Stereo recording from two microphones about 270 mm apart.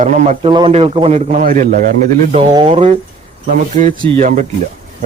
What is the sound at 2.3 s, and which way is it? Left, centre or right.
Speech, centre.